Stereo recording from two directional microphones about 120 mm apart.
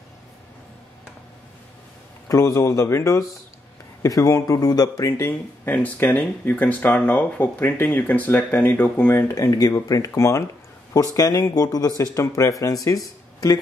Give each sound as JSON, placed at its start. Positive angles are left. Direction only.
{"t": 2.2, "sound": "speech", "side_deg": 25}